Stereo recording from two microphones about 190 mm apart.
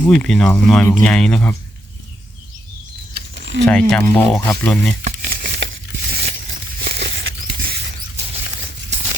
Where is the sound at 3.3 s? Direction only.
70° right (ahead or behind).